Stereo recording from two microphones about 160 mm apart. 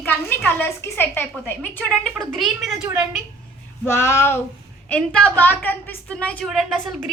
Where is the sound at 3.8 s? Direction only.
15° left (ahead or behind).